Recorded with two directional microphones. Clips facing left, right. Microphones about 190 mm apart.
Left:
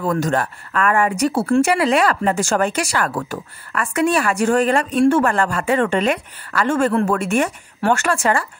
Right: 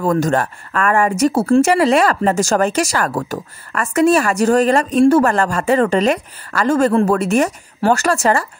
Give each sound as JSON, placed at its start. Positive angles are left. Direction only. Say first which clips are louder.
{"t": 0.0, "sound": "speech", "louder": "right 3 dB", "side_deg": -45}